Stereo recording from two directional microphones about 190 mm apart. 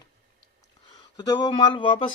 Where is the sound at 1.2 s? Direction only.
20° left (ahead or behind).